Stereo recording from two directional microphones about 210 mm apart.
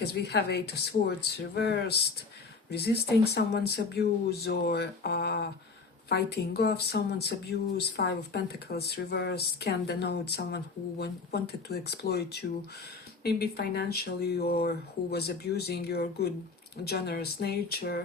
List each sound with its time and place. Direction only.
0.0 s speech: 50° left (ahead or behind)